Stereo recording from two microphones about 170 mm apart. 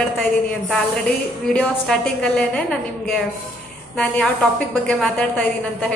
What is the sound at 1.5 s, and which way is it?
A woman's voice, 5° left (ahead or behind).